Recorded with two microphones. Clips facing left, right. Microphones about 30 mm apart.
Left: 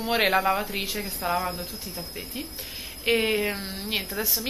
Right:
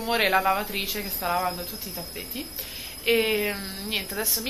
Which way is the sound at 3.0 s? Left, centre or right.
Centre.